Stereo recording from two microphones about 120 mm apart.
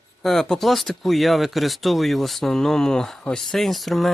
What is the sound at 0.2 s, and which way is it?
Speech, 5° left (ahead or behind).